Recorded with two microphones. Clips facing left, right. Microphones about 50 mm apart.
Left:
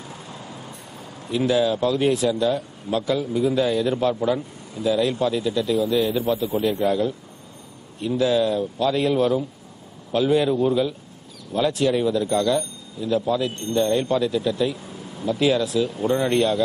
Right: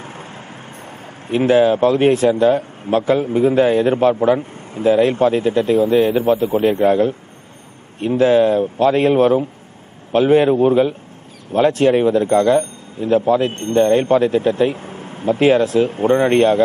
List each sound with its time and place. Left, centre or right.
0.0 s speech: right